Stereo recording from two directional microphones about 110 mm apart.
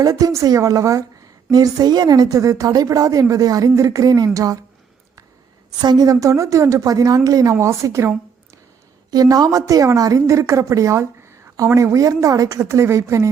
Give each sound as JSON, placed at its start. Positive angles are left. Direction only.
{"t": 0.0, "sound": "a woman's voice", "side_deg": -35}
{"t": 5.8, "sound": "a woman's voice", "side_deg": -40}